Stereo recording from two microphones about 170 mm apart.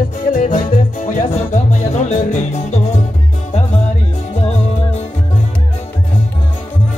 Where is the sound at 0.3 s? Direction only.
50° left (ahead or behind).